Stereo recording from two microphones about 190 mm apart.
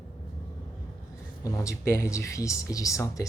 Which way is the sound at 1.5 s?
15° left (ahead or behind).